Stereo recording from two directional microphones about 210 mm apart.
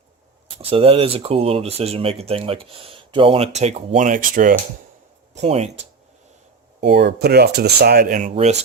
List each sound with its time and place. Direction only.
0.6 s speech: 25° right (ahead or behind)
6.8 s speech: 55° right (ahead or behind); by 8.5 s 35° right (ahead or behind)